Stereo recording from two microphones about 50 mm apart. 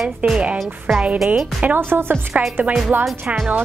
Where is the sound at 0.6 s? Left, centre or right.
Centre.